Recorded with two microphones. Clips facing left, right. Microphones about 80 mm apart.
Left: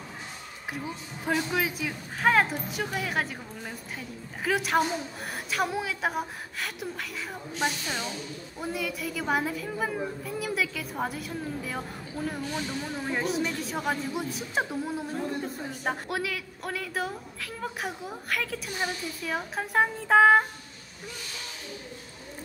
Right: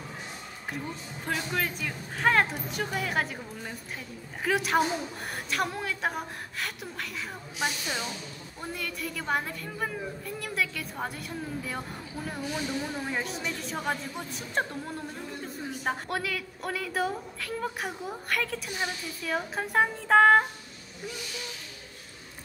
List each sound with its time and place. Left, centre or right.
0.7 s a woman's voice: centre